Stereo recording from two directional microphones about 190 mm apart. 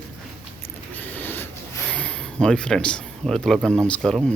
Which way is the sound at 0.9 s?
10° left (ahead or behind).